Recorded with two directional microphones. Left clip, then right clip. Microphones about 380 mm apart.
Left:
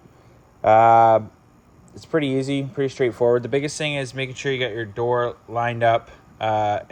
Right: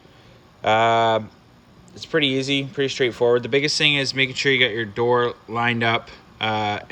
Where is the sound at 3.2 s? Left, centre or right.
Left.